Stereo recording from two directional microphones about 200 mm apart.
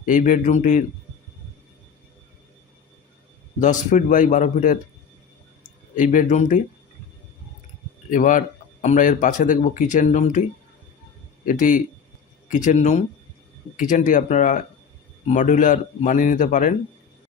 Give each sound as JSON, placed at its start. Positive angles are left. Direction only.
{"t": 0.0, "sound": "speech", "side_deg": 40}
{"t": 3.6, "sound": "speech", "side_deg": 40}
{"t": 6.0, "sound": "speech", "side_deg": 40}
{"t": 8.1, "sound": "speech", "side_deg": 40}
{"t": 11.4, "sound": "speech", "side_deg": 40}